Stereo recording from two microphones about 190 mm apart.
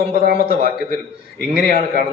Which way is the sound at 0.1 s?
50° right (ahead or behind).